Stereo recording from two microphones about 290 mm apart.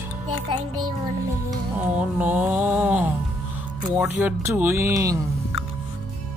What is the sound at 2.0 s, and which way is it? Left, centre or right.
Speech, centre.